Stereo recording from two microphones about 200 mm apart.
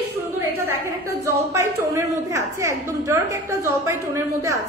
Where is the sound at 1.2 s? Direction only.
15° right (ahead or behind).